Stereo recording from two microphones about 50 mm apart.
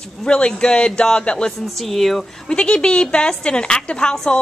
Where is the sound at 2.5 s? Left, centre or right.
Centre.